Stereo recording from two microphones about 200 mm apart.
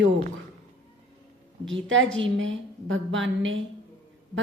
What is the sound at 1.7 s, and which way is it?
A woman's voice, 70° right (ahead or behind).